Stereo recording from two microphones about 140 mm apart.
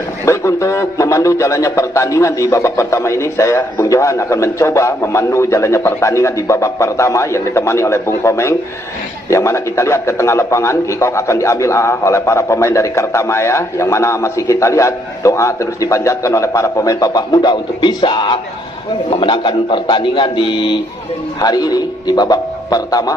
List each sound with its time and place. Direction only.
0.2 s a man's voice: 20° left (ahead or behind)